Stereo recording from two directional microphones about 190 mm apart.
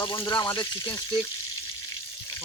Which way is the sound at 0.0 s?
25° left (ahead or behind).